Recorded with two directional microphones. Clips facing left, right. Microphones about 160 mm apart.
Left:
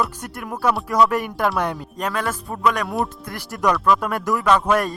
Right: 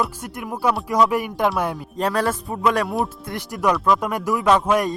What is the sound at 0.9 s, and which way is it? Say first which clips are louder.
Music: left 1 dB; 15° right (ahead or behind).